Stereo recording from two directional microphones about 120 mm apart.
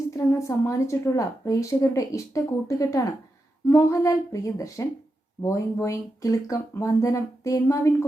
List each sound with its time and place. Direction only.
0.1 s a woman's voice: 25° left (ahead or behind)